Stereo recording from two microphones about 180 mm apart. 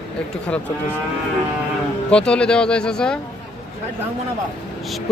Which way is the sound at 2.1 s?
5° left (ahead or behind).